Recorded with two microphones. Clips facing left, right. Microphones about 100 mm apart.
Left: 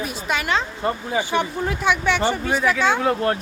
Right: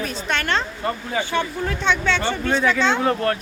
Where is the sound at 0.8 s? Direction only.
20° left (ahead or behind).